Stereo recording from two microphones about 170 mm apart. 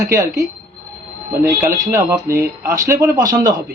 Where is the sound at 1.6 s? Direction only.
15° right (ahead or behind).